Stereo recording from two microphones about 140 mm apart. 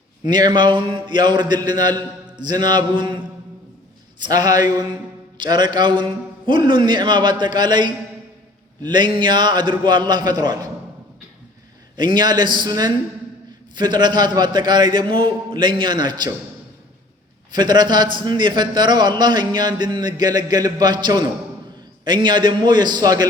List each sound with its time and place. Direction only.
0.3 s a man's voice: 30° right (ahead or behind)
4.2 s a man's voice: 30° right (ahead or behind)
11.9 s a man's voice: 30° right (ahead or behind)
17.5 s a man's voice: 30° right (ahead or behind)